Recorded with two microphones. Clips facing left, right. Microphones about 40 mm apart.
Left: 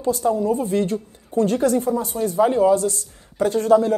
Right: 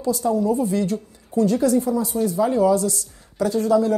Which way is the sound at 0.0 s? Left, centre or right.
Left.